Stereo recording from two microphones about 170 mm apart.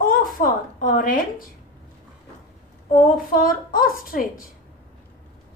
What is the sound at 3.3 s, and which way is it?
A woman's voice, 55° left (ahead or behind).